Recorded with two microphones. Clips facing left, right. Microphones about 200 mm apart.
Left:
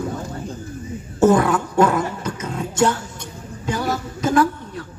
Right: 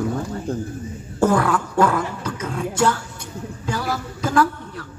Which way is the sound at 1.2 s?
20° left (ahead or behind).